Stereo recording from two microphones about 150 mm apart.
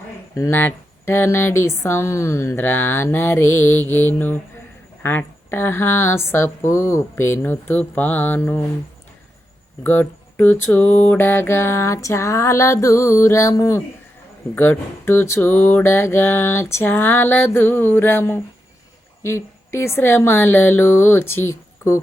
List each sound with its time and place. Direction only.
0.3 s mantra: 20° left (ahead or behind)
9.8 s mantra: 15° left (ahead or behind)